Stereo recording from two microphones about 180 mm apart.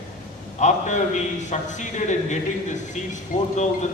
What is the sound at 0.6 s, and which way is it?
A man's voice, 40° left (ahead or behind).